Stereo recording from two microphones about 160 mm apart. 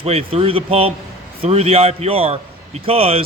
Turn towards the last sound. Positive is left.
turn(degrees=-35)  # may be behind; listen again after turning